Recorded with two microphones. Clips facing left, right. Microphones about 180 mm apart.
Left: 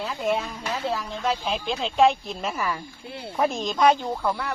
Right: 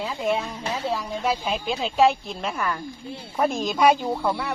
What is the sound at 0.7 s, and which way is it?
Speech, 10° right (ahead or behind).